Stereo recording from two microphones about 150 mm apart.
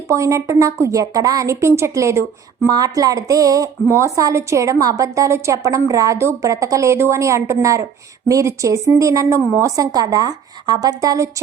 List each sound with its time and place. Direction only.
0.1 s speech: 20° right (ahead or behind)